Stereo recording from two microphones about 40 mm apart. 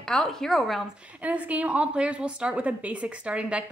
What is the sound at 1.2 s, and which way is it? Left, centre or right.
A woman's voice, right.